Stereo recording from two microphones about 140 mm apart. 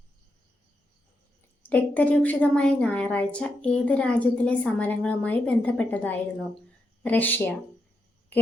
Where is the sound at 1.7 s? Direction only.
10° left (ahead or behind).